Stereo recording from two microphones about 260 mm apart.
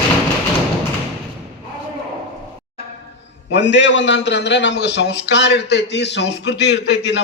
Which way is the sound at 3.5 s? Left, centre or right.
Left.